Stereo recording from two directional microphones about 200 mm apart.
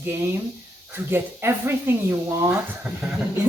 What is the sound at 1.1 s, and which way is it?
A woman's voice, 10° right (ahead or behind).